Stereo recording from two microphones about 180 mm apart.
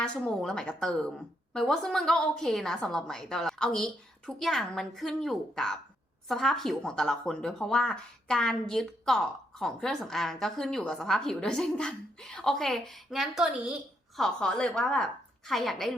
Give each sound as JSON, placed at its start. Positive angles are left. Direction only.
{"t": 0.0, "sound": "speech", "side_deg": 5}